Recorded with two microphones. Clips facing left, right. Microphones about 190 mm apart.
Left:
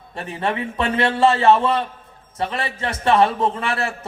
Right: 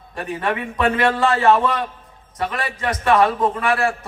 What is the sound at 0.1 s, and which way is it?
A man's voice, 25° left (ahead or behind).